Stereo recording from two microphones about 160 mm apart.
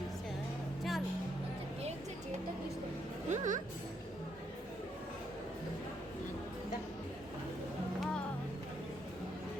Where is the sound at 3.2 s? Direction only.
50° right (ahead or behind).